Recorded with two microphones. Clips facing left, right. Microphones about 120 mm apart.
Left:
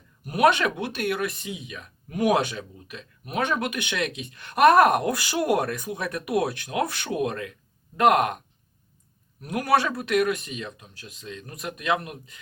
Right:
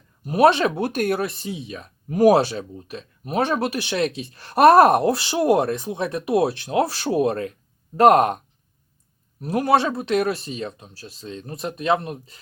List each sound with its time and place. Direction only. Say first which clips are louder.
0.3 s speech: right 4 dB; 30° right (ahead or behind)
0.9 s speech: right 5 dB; 40° right (ahead or behind)
9.4 s speech: right 4 dB; 30° right (ahead or behind)